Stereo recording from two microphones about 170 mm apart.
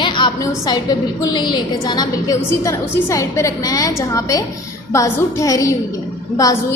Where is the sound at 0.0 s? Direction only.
30° left (ahead or behind).